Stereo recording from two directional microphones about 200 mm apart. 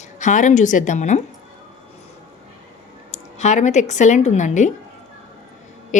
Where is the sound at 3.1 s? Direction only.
35° left (ahead or behind).